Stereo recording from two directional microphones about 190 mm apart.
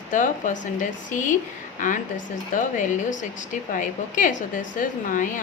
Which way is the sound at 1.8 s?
45° left (ahead or behind).